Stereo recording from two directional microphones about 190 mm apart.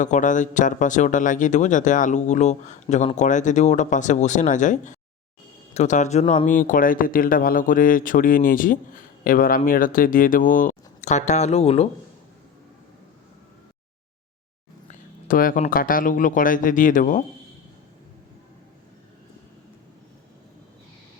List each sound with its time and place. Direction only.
0.0 s speech: 40° left (ahead or behind)
6.4 s speech: 45° left (ahead or behind)
14.8 s a sound: 45° left (ahead or behind)
15.6 s speech: 50° left (ahead or behind)